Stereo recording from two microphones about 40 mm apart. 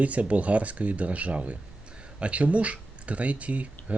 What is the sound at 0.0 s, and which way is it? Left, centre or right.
Speech, right.